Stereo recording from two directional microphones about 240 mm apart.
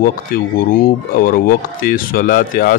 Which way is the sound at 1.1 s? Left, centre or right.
Left.